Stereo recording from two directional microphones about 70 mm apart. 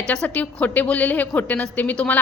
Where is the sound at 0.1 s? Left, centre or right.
Centre.